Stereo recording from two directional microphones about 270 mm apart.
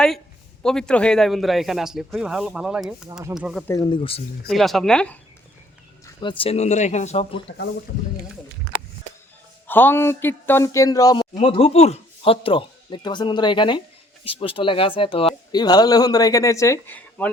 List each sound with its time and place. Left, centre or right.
0.6 s speech: centre
3.7 s speech: centre
4.4 s speech: centre
6.1 s speech: centre
9.6 s speech: centre